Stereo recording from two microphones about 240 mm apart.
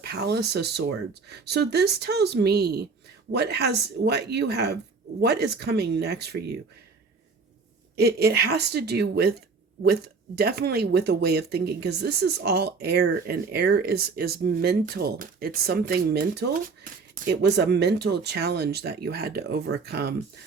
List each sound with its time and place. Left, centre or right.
0.0 s speech: right
7.9 s speech: right